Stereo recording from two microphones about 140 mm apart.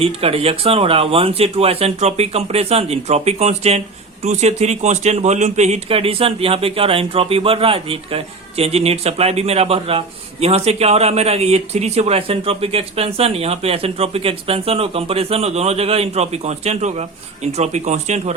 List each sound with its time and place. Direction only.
0.0 s speech: 45° right (ahead or behind)